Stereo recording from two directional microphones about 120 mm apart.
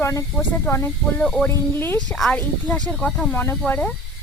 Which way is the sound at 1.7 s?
20° left (ahead or behind).